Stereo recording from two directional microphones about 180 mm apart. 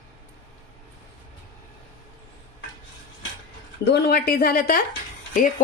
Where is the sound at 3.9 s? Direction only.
60° left (ahead or behind).